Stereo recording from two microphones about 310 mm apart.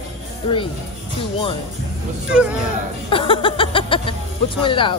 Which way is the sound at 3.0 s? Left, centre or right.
Centre.